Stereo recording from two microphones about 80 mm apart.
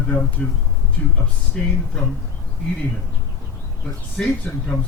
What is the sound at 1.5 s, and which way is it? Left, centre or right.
Speech, centre.